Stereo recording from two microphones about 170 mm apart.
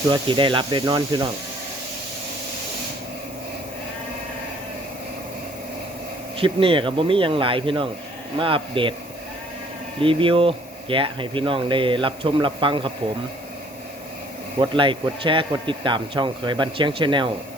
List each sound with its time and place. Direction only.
0.1 s speech: 30° right (ahead or behind)
6.3 s speech: 30° right (ahead or behind)
10.0 s speech: 30° right (ahead or behind)
14.6 s speech: 30° right (ahead or behind)